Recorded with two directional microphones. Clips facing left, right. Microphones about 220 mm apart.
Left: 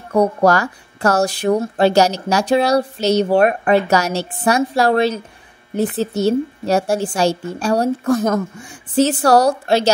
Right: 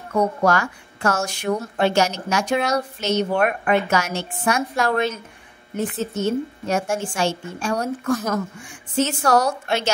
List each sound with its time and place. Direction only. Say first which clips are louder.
0.1 s speech: left 5 dB; 35° left (ahead or behind)